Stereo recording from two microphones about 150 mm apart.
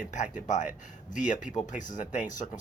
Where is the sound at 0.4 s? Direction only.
55° left (ahead or behind).